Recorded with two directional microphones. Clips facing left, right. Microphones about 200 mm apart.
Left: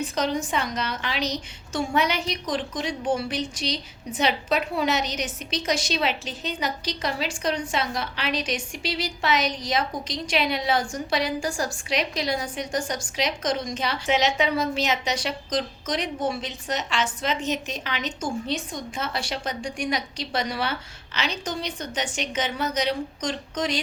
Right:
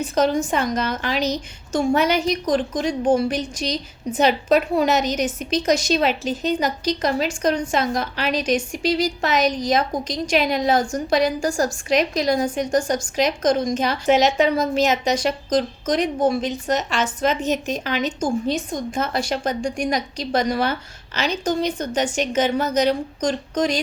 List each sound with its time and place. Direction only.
0.1 s a woman's voice: 45° right (ahead or behind)